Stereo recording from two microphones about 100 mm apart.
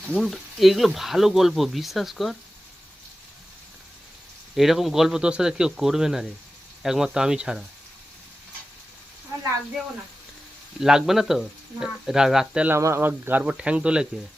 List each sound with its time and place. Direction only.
0.1 s speech: 5° left (ahead or behind)
4.5 s speech: centre (ahead or behind)
9.3 s a sound: 30° right (ahead or behind)
10.8 s speech: 5° right (ahead or behind)
12.6 s speech: 25° right (ahead or behind); by 14.1 s 10° right (ahead or behind)